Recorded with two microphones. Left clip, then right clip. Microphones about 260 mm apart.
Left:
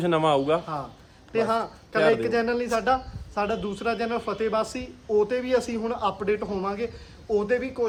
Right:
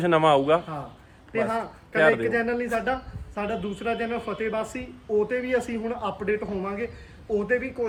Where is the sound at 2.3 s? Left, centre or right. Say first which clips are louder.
Left 1 dB; centre.